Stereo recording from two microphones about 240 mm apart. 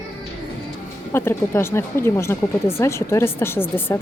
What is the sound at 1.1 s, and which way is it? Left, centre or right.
Speech, centre.